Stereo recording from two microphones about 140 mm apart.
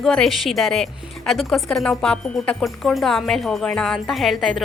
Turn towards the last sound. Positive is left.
turn(degrees=0)  # may be behind; listen again after turning